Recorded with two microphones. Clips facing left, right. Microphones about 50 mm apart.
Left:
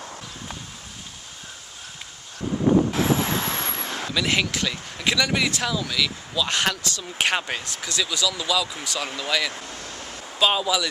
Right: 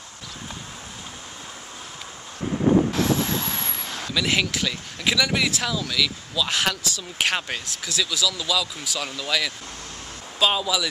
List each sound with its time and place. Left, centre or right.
2.9 s vehicle: centre
3.7 s speech: centre